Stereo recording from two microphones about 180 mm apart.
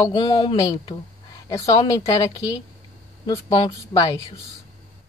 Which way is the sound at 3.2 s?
25° left (ahead or behind).